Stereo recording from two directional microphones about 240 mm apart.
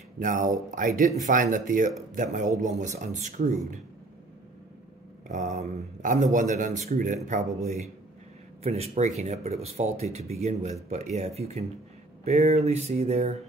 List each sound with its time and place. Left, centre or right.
0.2 s a man's voice: right
5.3 s a man's voice: right
8.6 s speech: right